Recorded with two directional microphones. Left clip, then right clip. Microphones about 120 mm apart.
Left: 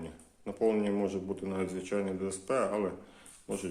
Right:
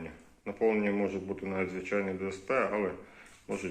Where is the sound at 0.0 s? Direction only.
45° left (ahead or behind).